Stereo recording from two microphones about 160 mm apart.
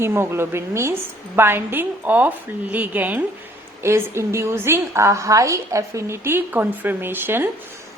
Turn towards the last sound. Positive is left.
turn(degrees=-15)  # may be behind; listen again after turning